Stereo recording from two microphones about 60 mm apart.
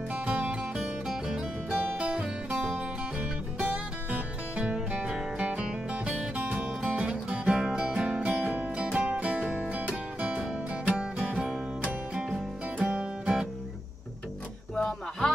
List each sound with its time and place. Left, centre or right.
0.1 s music: centre
0.7 s music: centre
11.0 s music: centre
14.8 s music: centre